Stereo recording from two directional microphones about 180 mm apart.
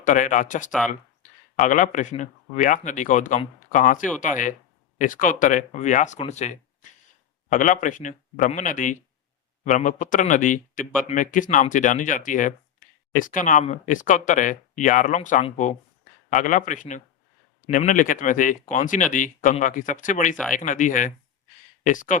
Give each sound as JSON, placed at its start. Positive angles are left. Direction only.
{"t": 0.0, "sound": "speech", "side_deg": 45}